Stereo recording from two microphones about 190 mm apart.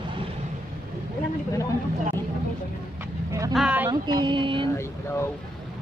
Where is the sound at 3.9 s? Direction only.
25° right (ahead or behind).